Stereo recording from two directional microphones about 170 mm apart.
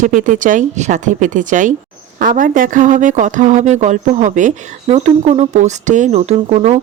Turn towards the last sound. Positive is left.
turn(degrees=-40)  # may be behind; listen again after turning